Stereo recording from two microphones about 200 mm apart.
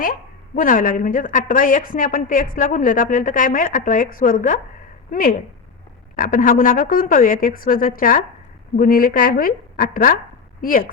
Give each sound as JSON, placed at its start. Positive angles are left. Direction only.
{"t": 0.5, "sound": "a woman's voice", "side_deg": 40}